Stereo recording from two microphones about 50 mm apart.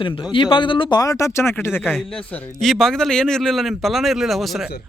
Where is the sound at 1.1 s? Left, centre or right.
Left.